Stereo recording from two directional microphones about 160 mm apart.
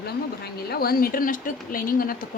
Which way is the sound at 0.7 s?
70° left (ahead or behind).